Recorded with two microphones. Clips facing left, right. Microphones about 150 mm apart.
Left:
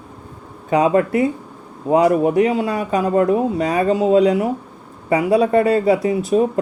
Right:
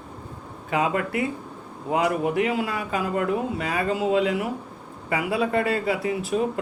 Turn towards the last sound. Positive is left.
turn(degrees=30)  # may be behind; listen again after turning